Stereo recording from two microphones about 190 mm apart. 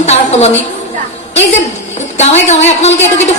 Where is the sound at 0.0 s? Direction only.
35° left (ahead or behind).